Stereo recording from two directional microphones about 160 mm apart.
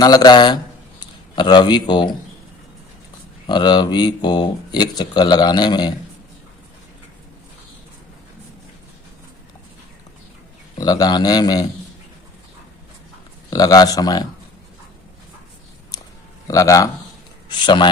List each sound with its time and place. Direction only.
0.0 s speech: 25° left (ahead or behind)
3.4 s speech: 30° left (ahead or behind)
10.8 s speech: 25° left (ahead or behind)
13.5 s speech: 25° left (ahead or behind)
16.5 s speech: 20° left (ahead or behind)